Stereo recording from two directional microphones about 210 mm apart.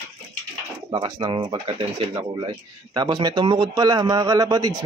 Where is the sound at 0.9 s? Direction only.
25° right (ahead or behind).